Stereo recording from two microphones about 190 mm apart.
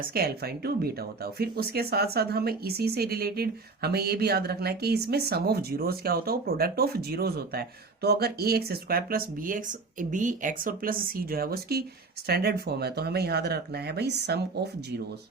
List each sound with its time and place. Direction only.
0.0 s speech: 55° right (ahead or behind)